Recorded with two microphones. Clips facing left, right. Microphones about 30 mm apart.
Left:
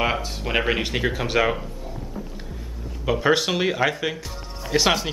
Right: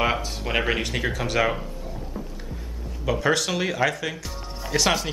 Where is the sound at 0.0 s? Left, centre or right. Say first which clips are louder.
Even; centre.